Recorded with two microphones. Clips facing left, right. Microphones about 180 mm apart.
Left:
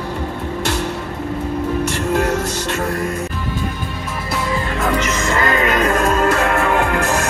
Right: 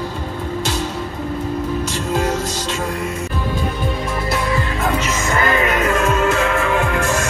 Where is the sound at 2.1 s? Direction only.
65° left (ahead or behind).